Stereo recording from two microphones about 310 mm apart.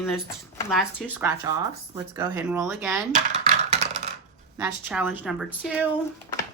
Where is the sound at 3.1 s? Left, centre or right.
Right.